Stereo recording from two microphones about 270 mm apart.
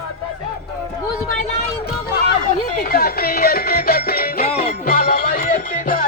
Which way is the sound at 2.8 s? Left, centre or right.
Left.